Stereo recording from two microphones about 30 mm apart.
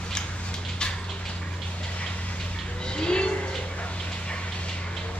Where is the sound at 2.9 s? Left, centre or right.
Left.